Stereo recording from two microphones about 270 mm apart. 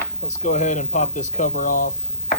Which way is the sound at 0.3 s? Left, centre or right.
Left.